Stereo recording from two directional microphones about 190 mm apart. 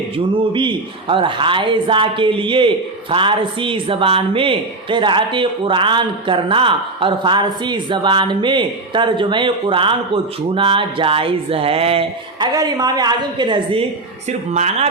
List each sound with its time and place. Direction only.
0.3 s a man's voice: 25° right (ahead or behind)
14.3 s speech: 35° right (ahead or behind)